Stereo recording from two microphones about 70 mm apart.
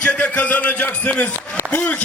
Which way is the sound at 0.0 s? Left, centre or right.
Centre.